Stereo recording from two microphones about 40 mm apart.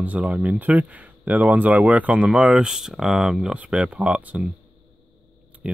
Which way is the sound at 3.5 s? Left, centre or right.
Right.